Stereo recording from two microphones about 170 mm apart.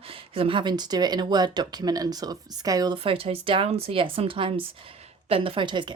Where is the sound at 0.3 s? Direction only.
30° right (ahead or behind).